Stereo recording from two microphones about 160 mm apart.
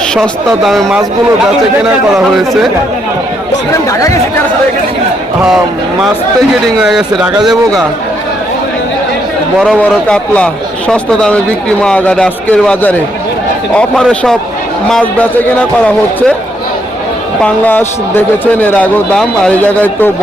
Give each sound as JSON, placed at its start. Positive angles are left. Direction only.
{"t": 0.1, "sound": "speech", "side_deg": 0}
{"t": 2.1, "sound": "speech", "side_deg": 0}
{"t": 3.8, "sound": "speech", "side_deg": 20}
{"t": 6.7, "sound": "speech", "side_deg": 0}
{"t": 9.6, "sound": "a man's voice", "side_deg": 5}
{"t": 17.4, "sound": "a man's voice", "side_deg": 10}